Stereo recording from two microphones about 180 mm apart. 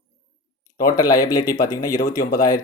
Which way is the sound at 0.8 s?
20° left (ahead or behind).